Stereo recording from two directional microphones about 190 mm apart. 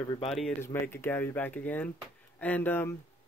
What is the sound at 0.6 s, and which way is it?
Speech, 10° left (ahead or behind).